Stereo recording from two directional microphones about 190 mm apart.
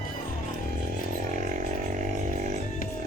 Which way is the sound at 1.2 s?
40° right (ahead or behind).